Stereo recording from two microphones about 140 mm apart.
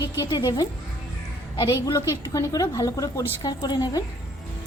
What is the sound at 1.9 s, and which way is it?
Speech, 25° left (ahead or behind).